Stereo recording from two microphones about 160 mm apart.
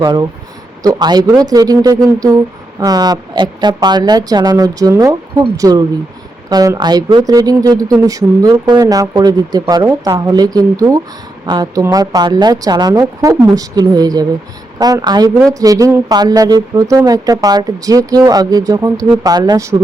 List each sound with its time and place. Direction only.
0.0 s speech: 25° right (ahead or behind)